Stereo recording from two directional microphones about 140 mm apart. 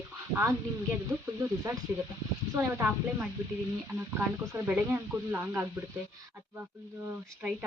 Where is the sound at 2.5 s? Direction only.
20° right (ahead or behind).